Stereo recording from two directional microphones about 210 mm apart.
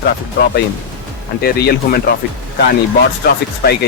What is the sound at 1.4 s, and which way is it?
Speech, 45° left (ahead or behind).